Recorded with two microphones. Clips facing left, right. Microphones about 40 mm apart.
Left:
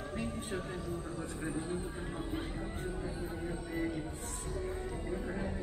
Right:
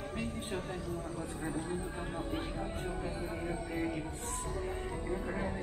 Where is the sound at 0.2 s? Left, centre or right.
Centre.